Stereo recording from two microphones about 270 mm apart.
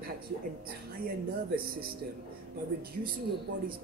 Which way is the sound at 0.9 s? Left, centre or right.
Right.